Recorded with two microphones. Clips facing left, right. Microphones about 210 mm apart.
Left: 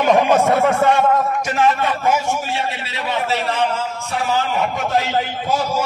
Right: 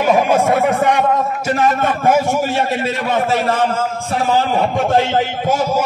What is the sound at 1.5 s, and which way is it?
A man's voice, 45° right (ahead or behind).